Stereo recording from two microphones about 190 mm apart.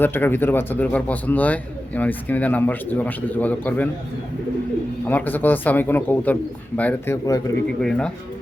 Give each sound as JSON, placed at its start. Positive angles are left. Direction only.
{"t": 0.0, "sound": "a man's voice", "side_deg": 10}
{"t": 5.0, "sound": "a man's voice", "side_deg": 10}
{"t": 7.8, "sound": "speech", "side_deg": 5}